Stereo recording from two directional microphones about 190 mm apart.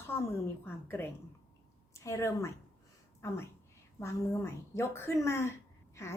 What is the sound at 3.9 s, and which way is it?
A woman's voice, 15° left (ahead or behind).